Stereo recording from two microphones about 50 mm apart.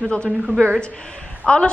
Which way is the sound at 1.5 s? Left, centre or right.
Left.